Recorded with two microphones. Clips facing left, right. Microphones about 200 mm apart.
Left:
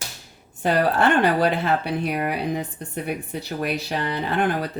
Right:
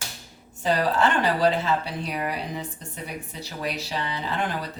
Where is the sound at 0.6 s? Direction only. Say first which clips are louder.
Left 3 dB; 60° left (ahead or behind).